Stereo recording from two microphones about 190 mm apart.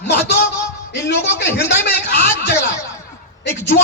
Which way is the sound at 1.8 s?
60° left (ahead or behind).